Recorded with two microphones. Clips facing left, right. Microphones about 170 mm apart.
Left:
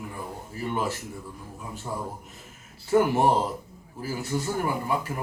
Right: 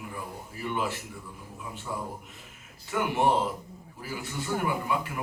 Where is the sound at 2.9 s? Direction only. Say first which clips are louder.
Left 5 dB; 40° left (ahead or behind).